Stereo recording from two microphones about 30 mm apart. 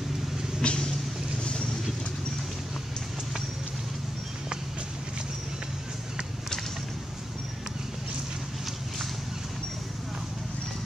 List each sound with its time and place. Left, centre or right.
0.6 s vehicle: left